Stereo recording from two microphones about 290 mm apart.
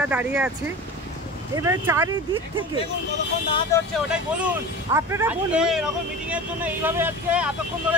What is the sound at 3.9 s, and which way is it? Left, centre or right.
Speech, centre.